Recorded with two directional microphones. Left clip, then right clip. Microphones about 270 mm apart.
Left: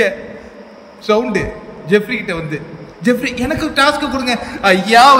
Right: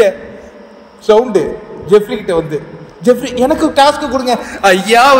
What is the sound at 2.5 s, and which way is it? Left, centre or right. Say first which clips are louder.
A man's voice: right 5 dB; centre.